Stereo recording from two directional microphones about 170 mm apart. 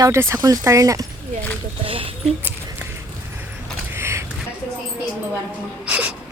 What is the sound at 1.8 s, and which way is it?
Speech, 30° right (ahead or behind).